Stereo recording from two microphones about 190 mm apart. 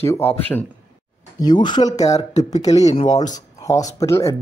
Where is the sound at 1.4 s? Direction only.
20° left (ahead or behind).